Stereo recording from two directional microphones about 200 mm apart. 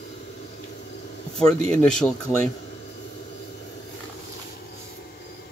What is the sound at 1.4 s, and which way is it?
Speech, 5° left (ahead or behind).